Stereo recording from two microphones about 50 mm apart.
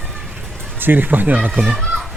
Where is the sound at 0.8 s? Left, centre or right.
Right.